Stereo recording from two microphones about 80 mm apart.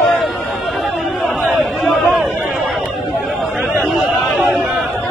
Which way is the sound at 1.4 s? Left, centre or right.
Centre.